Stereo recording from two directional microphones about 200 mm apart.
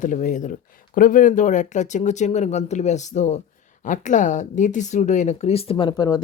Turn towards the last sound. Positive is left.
turn(degrees=20)  # may be behind; listen again after turning